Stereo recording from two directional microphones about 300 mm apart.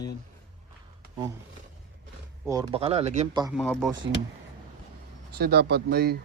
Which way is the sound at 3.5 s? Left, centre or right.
Centre.